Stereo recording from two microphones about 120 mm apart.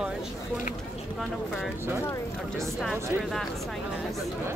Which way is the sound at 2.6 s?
Centre (ahead or behind).